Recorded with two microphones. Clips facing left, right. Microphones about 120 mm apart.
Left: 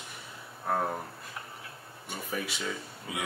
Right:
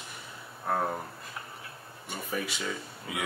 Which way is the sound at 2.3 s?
Centre (ahead or behind).